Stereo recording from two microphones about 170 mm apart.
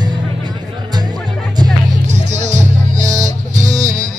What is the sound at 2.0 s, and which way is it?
Music, 45° right (ahead or behind).